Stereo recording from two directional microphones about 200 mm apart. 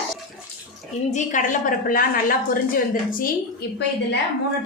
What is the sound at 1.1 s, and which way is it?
A woman's voice, 40° left (ahead or behind).